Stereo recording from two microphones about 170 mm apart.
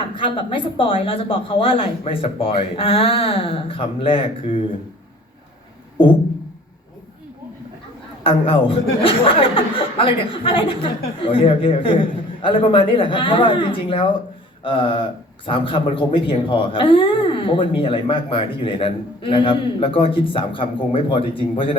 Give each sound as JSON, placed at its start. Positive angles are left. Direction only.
{"t": 0.1, "sound": "speech", "side_deg": 30}
{"t": 8.2, "sound": "speech", "side_deg": 35}
{"t": 14.6, "sound": "a sound", "side_deg": 30}
{"t": 15.4, "sound": "speech", "side_deg": 30}